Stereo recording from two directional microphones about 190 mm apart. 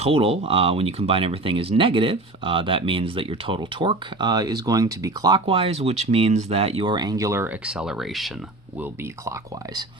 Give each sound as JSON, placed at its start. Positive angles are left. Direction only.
{"t": 0.0, "sound": "speech", "side_deg": -30}
{"t": 8.8, "sound": "speech", "side_deg": -15}